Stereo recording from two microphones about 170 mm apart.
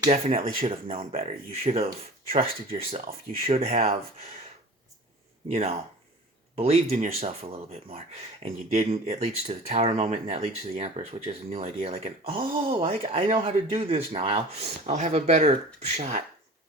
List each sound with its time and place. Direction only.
0.6 s speech: 35° right (ahead or behind)
5.5 s speech: 40° right (ahead or behind)